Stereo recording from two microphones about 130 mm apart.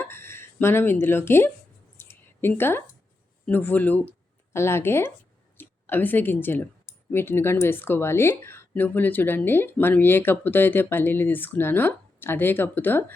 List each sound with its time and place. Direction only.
0.0 s speech: 20° left (ahead or behind)
2.0 s a sound: 15° left (ahead or behind)
3.4 s a woman's voice: 15° left (ahead or behind)